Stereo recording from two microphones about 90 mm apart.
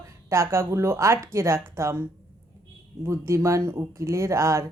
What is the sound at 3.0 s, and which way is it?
Speech, 30° right (ahead or behind).